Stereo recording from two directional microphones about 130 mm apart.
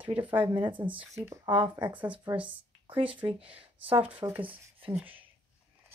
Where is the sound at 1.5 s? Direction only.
35° right (ahead or behind).